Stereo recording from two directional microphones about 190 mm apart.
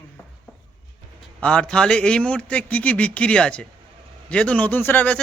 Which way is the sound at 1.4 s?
5° left (ahead or behind).